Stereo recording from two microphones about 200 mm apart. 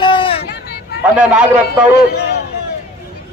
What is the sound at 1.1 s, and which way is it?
Speech, 5° right (ahead or behind).